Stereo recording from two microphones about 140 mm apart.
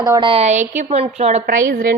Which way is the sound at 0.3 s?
50° right (ahead or behind).